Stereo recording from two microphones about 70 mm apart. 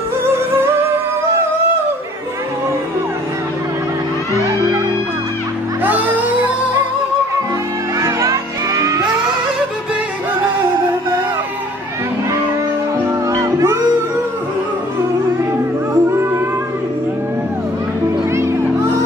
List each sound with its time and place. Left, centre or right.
5.9 s music: right
8.0 s music: right
13.3 s music: right
16.0 s music: right
18.3 s music: right